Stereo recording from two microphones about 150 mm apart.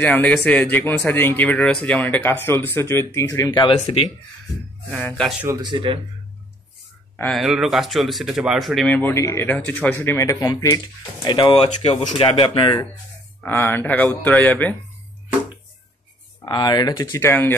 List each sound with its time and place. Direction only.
0.0 s speech: 10° left (ahead or behind)
3.6 s speech: 40° left (ahead or behind)
4.9 s speech: 5° left (ahead or behind)
5.6 s speech: 30° right (ahead or behind)
7.2 s speech: centre (ahead or behind)
8.9 s speech: 15° left (ahead or behind)
11.6 s speech: 45° left (ahead or behind)
13.4 s speech: 15° left (ahead or behind)
16.4 s speech: 30° left (ahead or behind)
17.2 s speech: 15° left (ahead or behind)